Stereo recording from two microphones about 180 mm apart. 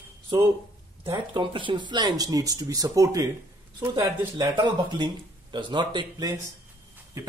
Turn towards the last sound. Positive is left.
turn(degrees=-25)  # may be behind; listen again after turning